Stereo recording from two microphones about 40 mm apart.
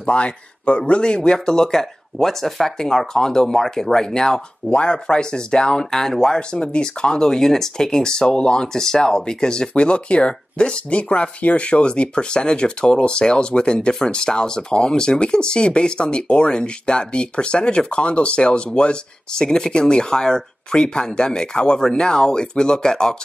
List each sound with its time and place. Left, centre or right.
0.0 s a man's voice: left
4.6 s speech: left